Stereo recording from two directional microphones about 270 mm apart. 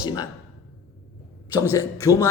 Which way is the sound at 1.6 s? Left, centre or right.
Centre.